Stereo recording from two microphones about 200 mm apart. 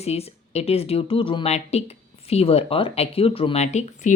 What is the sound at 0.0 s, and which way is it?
Speech, 30° left (ahead or behind).